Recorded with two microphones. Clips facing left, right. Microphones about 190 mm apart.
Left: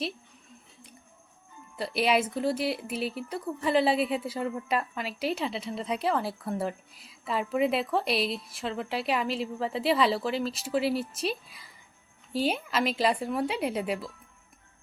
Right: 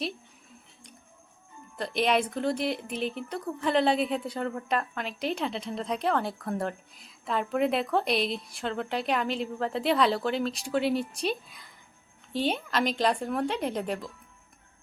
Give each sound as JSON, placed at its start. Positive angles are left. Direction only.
{"t": 1.7, "sound": "speech", "side_deg": 5}